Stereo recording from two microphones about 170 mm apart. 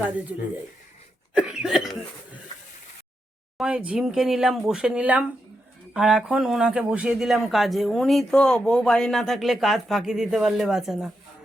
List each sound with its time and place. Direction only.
1.4 s cough: 5° right (ahead or behind)
3.6 s speech: 5° right (ahead or behind)